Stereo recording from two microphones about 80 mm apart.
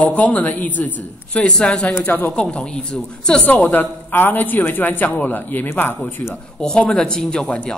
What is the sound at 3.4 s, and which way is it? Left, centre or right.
A man's voice, left.